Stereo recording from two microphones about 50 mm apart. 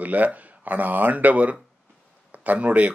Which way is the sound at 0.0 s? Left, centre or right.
Right.